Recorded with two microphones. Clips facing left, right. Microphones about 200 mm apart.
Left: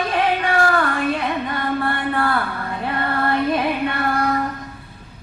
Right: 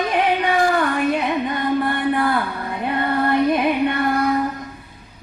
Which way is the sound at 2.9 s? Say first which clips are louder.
Right 3 dB; 20° right (ahead or behind).